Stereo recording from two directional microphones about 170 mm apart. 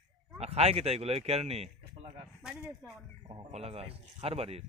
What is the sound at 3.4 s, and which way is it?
Speech, 40° right (ahead or behind).